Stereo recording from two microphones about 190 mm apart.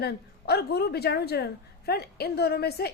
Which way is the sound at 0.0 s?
60° left (ahead or behind).